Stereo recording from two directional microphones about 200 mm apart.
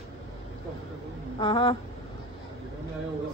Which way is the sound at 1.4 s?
25° left (ahead or behind).